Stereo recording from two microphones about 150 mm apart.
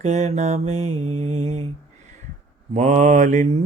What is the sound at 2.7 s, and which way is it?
Mantra, 50° right (ahead or behind).